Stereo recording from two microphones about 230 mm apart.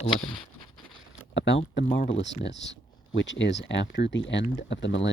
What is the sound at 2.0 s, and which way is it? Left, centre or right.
Speech, left.